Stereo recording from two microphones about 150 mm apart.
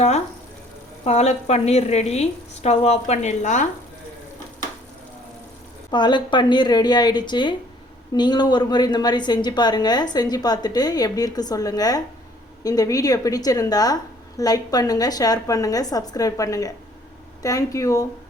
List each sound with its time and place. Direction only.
1.0 s a woman's voice: 45° left (ahead or behind)
5.9 s a woman's voice: 30° left (ahead or behind)